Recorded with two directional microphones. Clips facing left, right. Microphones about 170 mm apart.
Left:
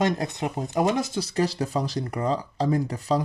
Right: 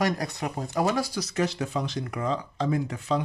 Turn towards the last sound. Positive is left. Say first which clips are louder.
# left 3 dB
turn(degrees=35)  # may be behind; listen again after turning